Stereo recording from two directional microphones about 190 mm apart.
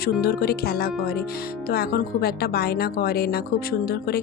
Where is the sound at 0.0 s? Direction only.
55° left (ahead or behind).